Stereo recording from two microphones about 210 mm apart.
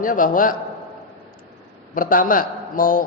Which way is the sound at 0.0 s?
40° left (ahead or behind).